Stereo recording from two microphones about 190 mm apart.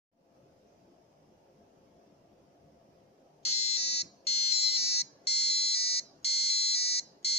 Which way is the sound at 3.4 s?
30° left (ahead or behind).